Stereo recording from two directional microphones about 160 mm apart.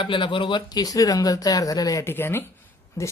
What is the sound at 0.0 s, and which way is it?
Speech, 30° left (ahead or behind).